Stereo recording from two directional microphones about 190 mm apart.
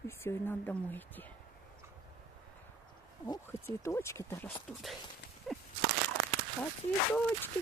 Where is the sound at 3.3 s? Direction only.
15° left (ahead or behind).